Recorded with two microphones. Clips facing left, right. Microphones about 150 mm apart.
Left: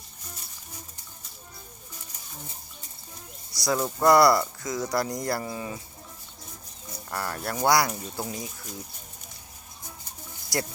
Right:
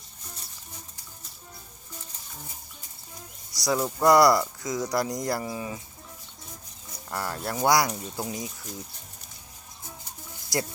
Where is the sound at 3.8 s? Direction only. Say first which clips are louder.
Even; centre (ahead or behind).